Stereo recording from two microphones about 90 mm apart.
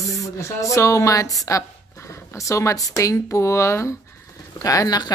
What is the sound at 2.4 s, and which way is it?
Speech, 35° left (ahead or behind).